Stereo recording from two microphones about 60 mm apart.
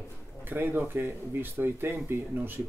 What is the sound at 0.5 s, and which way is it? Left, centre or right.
Speech, right.